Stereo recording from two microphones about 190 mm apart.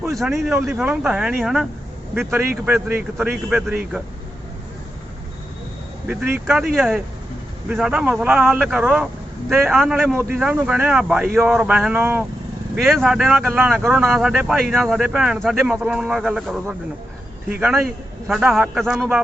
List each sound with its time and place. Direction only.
0.2 s speech: centre (ahead or behind)
2.6 s speech: 10° right (ahead or behind)
6.1 s speech: 5° right (ahead or behind)